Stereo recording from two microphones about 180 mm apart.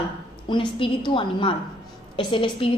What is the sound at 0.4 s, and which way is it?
A woman's voice, 25° left (ahead or behind).